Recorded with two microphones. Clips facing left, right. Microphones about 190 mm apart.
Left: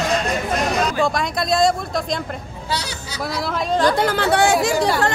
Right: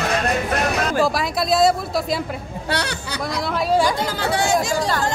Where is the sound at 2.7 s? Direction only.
65° right (ahead or behind).